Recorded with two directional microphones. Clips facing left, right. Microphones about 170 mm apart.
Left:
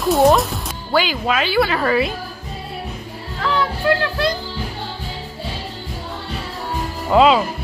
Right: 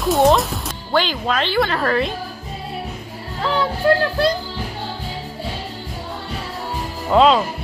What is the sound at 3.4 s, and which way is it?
Music, 30° right (ahead or behind).